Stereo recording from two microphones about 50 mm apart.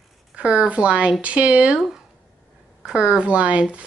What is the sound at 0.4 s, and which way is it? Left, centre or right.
A woman's voice, right.